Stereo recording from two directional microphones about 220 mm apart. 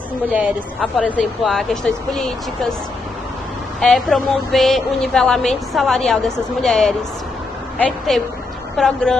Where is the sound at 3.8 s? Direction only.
Centre (ahead or behind).